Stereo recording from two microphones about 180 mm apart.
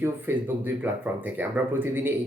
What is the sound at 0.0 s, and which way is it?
Speech, 10° right (ahead or behind).